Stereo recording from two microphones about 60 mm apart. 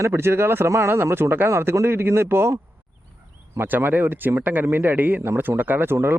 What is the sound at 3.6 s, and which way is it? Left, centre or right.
Speech, right.